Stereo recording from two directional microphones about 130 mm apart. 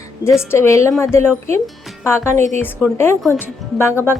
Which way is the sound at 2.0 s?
20° left (ahead or behind).